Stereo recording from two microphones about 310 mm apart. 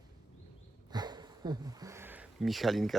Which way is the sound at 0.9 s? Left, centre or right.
Centre.